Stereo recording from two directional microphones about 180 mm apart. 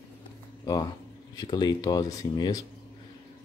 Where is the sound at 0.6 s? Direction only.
20° left (ahead or behind).